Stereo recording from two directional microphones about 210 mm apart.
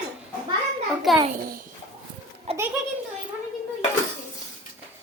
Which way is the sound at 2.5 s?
30° right (ahead or behind).